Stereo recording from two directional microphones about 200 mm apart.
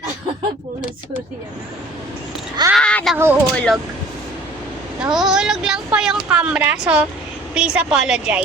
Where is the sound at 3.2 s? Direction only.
10° right (ahead or behind).